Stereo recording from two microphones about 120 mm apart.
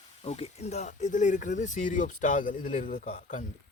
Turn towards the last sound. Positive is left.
turn(degrees=90)